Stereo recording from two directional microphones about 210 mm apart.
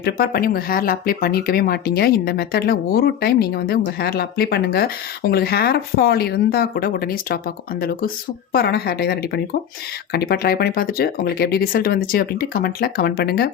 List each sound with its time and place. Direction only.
0.0 s speech: 45° left (ahead or behind)